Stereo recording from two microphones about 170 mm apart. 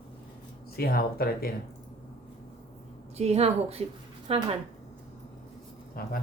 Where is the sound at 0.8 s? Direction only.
65° left (ahead or behind).